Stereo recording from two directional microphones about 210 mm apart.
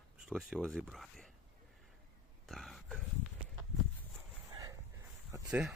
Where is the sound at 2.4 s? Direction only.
Centre (ahead or behind).